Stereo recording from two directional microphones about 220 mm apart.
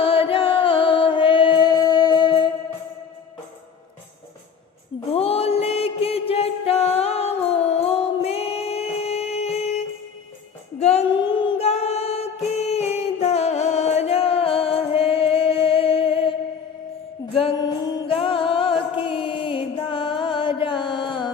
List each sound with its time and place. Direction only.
0.0 s music: 25° left (ahead or behind)
5.1 s music: 25° left (ahead or behind)
17.3 s music: 25° left (ahead or behind)